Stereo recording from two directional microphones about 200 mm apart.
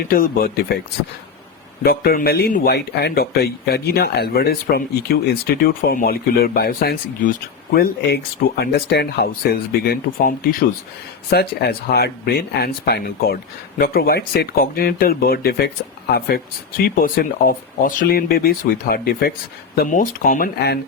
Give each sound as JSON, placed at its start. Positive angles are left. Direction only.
{"t": 0.0, "sound": "speech", "side_deg": 45}
{"t": 1.8, "sound": "speech", "side_deg": 50}